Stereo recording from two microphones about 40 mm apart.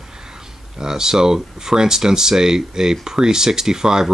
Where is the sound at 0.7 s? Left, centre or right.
Centre.